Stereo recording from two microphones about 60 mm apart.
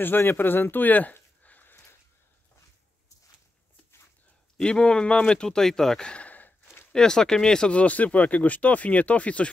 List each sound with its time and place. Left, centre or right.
0.0 s speech: left
4.6 s speech: centre
6.9 s speech: centre